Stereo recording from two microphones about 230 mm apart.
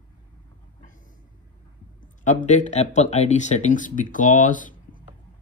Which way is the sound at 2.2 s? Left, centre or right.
Left.